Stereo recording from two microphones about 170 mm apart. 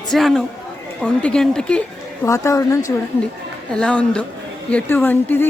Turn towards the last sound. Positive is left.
turn(degrees=10)  # may be behind; listen again after turning